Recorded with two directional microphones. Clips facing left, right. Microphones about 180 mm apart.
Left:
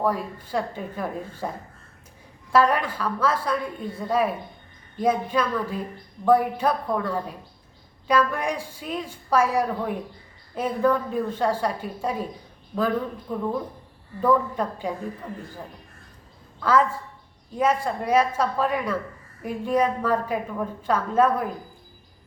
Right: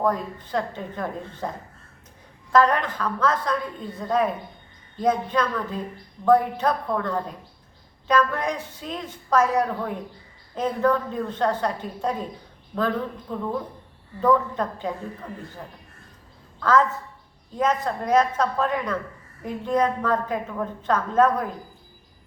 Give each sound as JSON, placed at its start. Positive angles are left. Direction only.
{"t": 0.0, "sound": "a woman's voice", "side_deg": 10}
{"t": 13.3, "sound": "a woman's voice", "side_deg": 10}
{"t": 16.6, "sound": "a woman's voice", "side_deg": 10}